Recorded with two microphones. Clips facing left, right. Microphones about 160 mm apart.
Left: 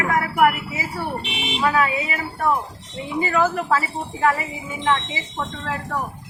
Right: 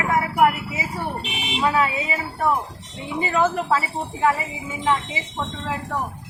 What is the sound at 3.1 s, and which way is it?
A woman's voice, 25° right (ahead or behind).